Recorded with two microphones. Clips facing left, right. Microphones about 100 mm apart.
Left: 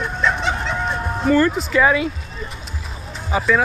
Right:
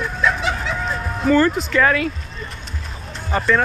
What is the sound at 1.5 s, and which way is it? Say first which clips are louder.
Speech: left 1 dB; centre (ahead or behind).